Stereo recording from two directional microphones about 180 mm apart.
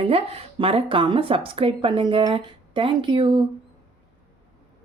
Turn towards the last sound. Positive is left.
turn(degrees=-25)  # may be behind; listen again after turning